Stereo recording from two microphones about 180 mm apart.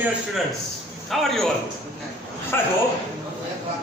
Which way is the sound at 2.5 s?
10° left (ahead or behind).